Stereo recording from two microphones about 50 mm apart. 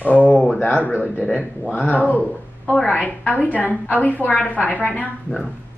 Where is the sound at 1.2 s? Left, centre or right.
Left.